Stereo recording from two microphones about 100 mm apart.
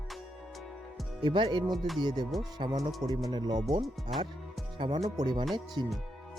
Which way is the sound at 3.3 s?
45° right (ahead or behind).